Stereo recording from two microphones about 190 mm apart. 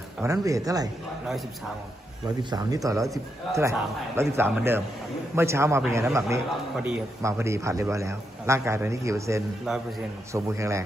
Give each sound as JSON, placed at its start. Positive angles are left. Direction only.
{"t": 0.2, "sound": "a man's voice", "side_deg": -15}
{"t": 2.2, "sound": "a man's voice", "side_deg": -20}
{"t": 6.7, "sound": "a man's voice", "side_deg": -5}
{"t": 7.2, "sound": "a man's voice", "side_deg": -15}
{"t": 9.7, "sound": "a man's voice", "side_deg": -5}
{"t": 10.3, "sound": "a man's voice", "side_deg": -15}